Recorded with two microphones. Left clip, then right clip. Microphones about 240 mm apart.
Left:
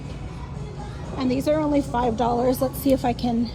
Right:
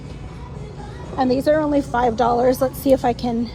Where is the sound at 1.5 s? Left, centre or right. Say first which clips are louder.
Right 1 dB; right.